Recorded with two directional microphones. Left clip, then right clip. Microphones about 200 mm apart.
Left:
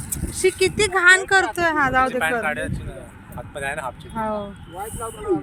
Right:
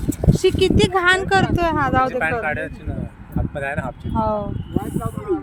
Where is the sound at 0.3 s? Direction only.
10° right (ahead or behind).